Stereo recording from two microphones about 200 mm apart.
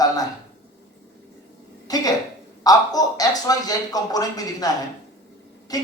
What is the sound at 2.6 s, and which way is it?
Speech, 20° left (ahead or behind).